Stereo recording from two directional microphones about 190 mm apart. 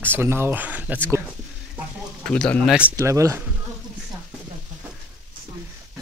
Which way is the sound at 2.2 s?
5° left (ahead or behind).